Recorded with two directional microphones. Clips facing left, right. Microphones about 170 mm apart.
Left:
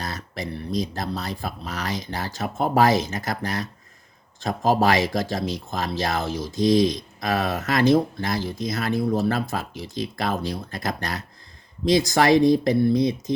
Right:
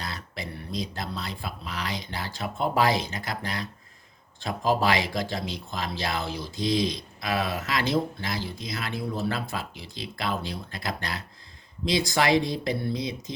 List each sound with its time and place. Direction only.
0.0 s speech: 45° left (ahead or behind)